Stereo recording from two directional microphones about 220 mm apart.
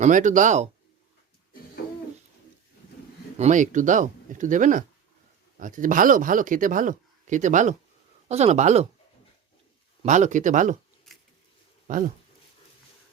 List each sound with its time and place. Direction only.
0.0 s speech: 35° right (ahead or behind)
3.3 s speech: 30° right (ahead or behind)
10.0 s speech: 35° right (ahead or behind)
11.9 s speech: 35° right (ahead or behind)